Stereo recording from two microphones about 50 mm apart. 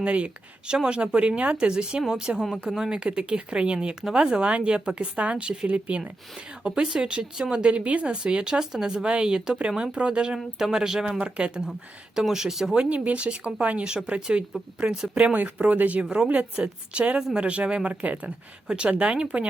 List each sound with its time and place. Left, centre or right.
0.0 s speech: right
10.3 s speech: centre
11.2 s speech: right; by 12.7 s centre
12.7 s speech: right
16.0 s speech: centre
16.3 s speech: right